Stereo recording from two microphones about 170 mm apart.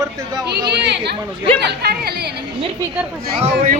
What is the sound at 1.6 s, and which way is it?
Speech, 70° right (ahead or behind).